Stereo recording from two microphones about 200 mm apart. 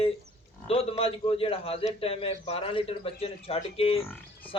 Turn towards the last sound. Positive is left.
turn(degrees=30)  # may be behind; listen again after turning